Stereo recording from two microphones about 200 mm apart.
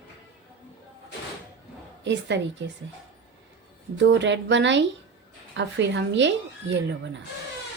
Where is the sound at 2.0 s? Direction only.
60° right (ahead or behind).